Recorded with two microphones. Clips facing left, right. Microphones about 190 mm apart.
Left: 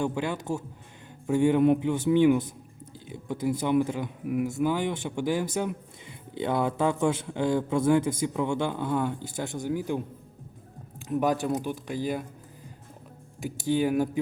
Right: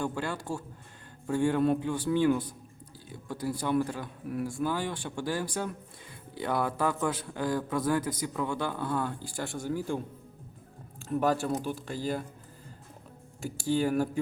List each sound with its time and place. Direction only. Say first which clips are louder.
0.0 s a man's voice: left 4 dB; 20° left (ahead or behind)
11.1 s speech: left 2 dB; 15° left (ahead or behind)
13.4 s speech: left 2 dB; 15° left (ahead or behind)